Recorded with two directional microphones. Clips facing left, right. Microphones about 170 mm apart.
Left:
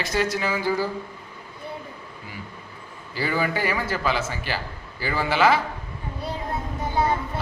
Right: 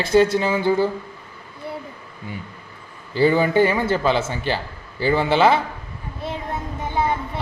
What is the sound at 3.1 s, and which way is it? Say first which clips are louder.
A man's voice: right 9 dB; 25° right (ahead or behind).